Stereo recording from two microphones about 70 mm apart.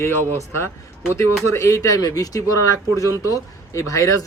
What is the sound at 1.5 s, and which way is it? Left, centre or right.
A man's voice, left.